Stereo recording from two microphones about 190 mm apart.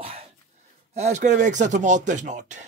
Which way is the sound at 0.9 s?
35° right (ahead or behind).